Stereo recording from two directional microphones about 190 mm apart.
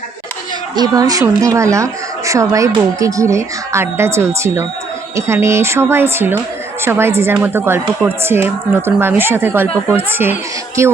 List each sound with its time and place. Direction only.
0.8 s a woman's voice: 20° right (ahead or behind)